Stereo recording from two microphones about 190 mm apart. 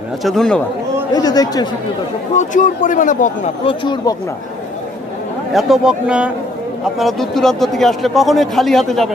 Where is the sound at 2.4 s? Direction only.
45° left (ahead or behind).